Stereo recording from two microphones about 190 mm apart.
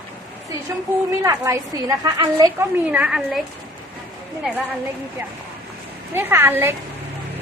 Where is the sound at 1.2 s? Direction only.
15° right (ahead or behind).